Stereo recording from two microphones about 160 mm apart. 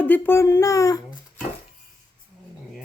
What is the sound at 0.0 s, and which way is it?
Speech, 10° left (ahead or behind).